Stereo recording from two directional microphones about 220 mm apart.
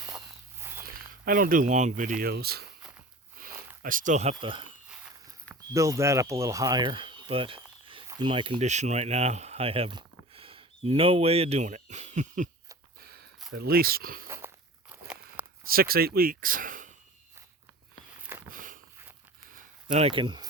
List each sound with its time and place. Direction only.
0.6 s a sound: 10° right (ahead or behind)
0.9 s speech: 40° right (ahead or behind)
3.8 s speech: 35° right (ahead or behind)
5.7 s speech: 15° right (ahead or behind); by 12.5 s 35° right (ahead or behind)
13.5 s speech: 45° right (ahead or behind)
14.3 s walk: 10° right (ahead or behind)
15.6 s speech: 40° right (ahead or behind)
18.5 s a sound: 35° right (ahead or behind)
20.1 s speech: 25° right (ahead or behind)